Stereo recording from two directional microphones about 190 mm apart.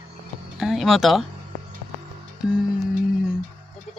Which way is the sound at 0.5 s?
Centre (ahead or behind).